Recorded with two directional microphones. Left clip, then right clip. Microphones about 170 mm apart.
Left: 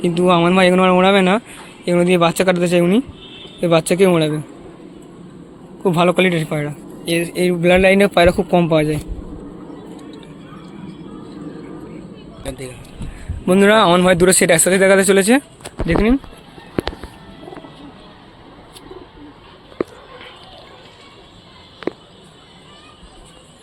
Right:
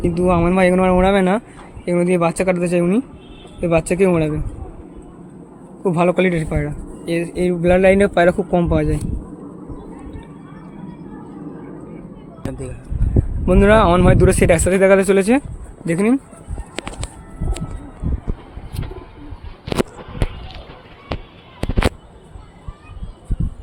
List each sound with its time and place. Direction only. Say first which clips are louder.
0.0 s speech: left 3 dB; centre (ahead or behind)
5.8 s speech: left 2 dB; centre (ahead or behind)
12.5 s speech: left 1 dB; 50° right (ahead or behind)
13.4 s speech: left 1 dB; centre (ahead or behind)